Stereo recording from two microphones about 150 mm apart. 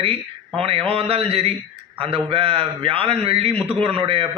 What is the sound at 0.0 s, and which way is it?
Speech, 40° right (ahead or behind).